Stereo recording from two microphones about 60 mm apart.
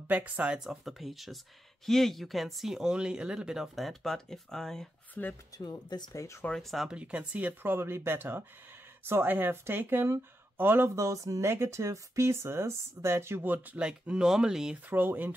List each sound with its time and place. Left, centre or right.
0.1 s speech: right
0.7 s speech: centre
5.2 s speech: left
5.5 s speech: left
6.1 s speech: left
6.5 s speech: centre
6.9 s speech: centre
7.6 s speech: right
11.0 s speech: right
11.4 s speech: right
13.4 s speech: right
13.7 s speech: centre
14.9 s speech: right